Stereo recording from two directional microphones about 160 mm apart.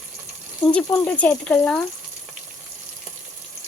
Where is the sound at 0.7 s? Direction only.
5° left (ahead or behind).